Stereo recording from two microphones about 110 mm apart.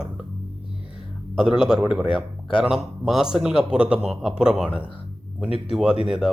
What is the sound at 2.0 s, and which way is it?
Speech, 50° left (ahead or behind).